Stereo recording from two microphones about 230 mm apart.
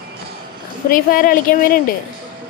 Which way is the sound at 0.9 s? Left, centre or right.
Left.